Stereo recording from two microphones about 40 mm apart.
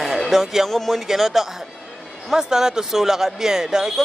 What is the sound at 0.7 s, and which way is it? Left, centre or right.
Speech, centre.